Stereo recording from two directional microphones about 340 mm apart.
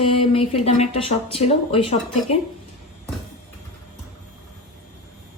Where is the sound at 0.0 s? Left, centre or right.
Centre.